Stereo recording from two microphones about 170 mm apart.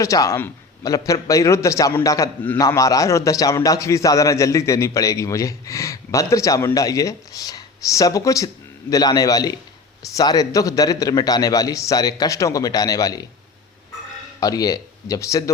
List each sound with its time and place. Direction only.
0.0 s a man's voice: 20° left (ahead or behind)
14.4 s a man's voice: 20° left (ahead or behind)